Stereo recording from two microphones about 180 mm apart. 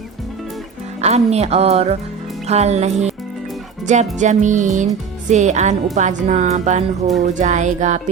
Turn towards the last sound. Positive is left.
turn(degrees=-40)  # may be behind; listen again after turning